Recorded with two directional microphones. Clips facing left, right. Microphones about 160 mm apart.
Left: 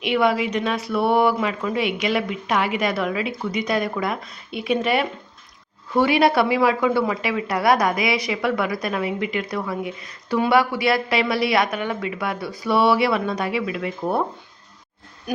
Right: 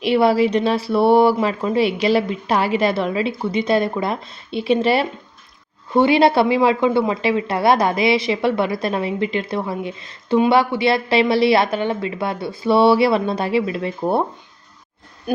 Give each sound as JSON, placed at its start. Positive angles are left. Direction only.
{"t": 0.0, "sound": "speech", "side_deg": -35}